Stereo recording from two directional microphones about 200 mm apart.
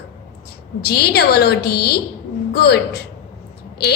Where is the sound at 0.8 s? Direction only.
55° left (ahead or behind).